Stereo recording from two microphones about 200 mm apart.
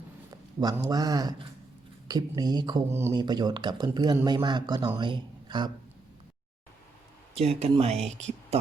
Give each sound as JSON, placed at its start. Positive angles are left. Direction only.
{"t": 0.3, "sound": "speech", "side_deg": -20}
{"t": 7.3, "sound": "speech", "side_deg": -30}